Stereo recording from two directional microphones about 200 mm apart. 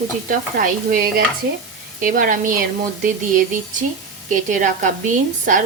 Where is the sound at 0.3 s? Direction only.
45° right (ahead or behind).